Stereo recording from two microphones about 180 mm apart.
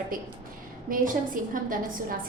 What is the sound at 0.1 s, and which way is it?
A woman's voice, 50° right (ahead or behind).